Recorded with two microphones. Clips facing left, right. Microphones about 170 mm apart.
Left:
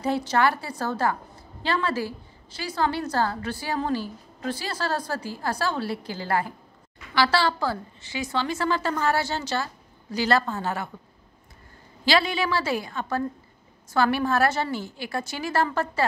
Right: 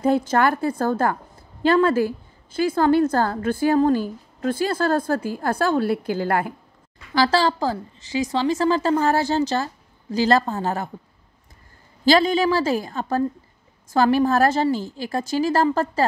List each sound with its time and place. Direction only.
0.0 s a woman's voice: 50° right (ahead or behind)
7.2 s a woman's voice: 40° right (ahead or behind)
12.0 s a woman's voice: 45° right (ahead or behind)